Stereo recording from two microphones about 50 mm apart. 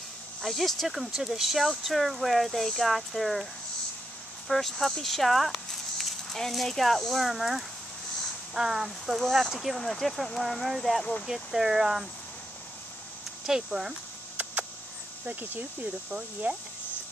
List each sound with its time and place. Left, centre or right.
0.4 s speech: centre
4.5 s speech: centre
13.5 s speech: centre
14.3 s a sound: right
15.8 s speech: right